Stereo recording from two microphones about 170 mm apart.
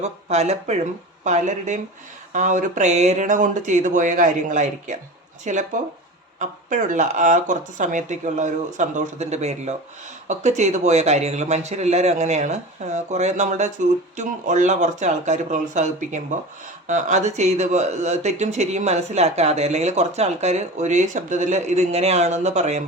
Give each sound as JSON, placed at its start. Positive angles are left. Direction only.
{"t": 0.0, "sound": "speech", "side_deg": -40}